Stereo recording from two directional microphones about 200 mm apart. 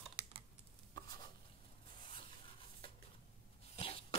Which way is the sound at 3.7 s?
25° left (ahead or behind).